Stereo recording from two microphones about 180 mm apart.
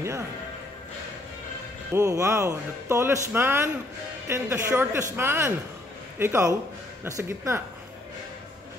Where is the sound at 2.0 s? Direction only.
15° right (ahead or behind).